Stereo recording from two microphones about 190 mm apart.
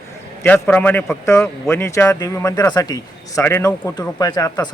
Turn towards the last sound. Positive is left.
turn(degrees=20)  # may be behind; listen again after turning